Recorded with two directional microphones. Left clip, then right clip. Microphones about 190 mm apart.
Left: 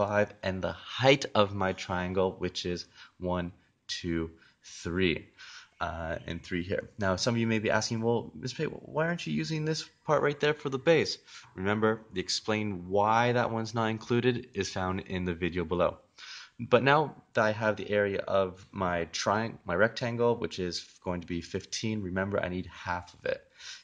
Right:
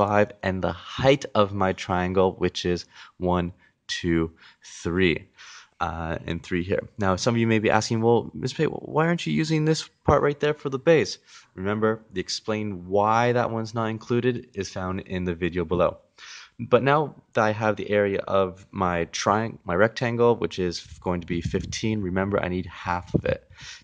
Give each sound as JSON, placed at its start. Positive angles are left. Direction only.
{"t": 0.0, "sound": "speech", "side_deg": -45}
{"t": 11.5, "sound": "speech", "side_deg": -30}
{"t": 12.9, "sound": "speech", "side_deg": -40}